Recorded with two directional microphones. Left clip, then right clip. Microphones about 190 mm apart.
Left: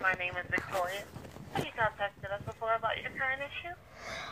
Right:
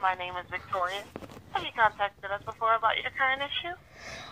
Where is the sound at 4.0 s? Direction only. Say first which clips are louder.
Left 1 dB; centre (ahead or behind).